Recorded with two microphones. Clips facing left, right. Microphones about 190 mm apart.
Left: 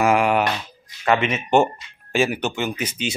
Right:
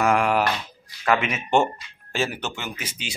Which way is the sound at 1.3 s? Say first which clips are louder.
Left 3 dB; 5° left (ahead or behind).